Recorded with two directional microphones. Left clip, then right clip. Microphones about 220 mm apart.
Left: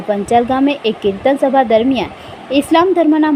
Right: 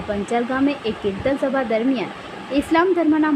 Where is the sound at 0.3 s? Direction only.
20° left (ahead or behind).